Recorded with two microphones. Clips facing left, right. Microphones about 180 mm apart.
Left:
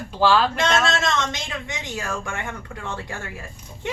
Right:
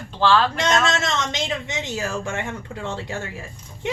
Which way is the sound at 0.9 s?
20° right (ahead or behind).